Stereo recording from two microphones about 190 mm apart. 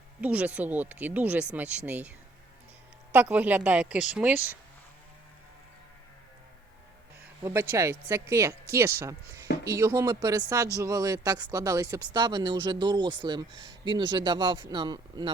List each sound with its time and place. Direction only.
0.2 s speech: 5° right (ahead or behind)
7.4 s speech: 15° right (ahead or behind)